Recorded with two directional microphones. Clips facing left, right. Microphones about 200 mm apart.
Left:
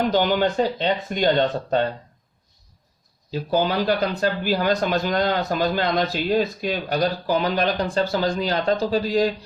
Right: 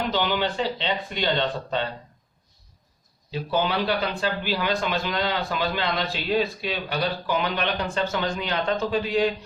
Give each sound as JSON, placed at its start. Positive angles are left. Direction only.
{"t": 0.1, "sound": "speech", "side_deg": 45}
{"t": 3.3, "sound": "speech", "side_deg": 40}